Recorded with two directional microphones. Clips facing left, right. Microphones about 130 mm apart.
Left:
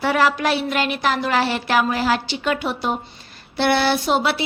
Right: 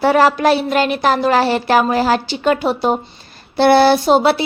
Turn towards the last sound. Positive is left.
turn(degrees=-35)  # may be behind; listen again after turning